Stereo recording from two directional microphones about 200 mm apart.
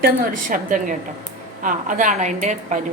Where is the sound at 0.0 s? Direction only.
45° right (ahead or behind).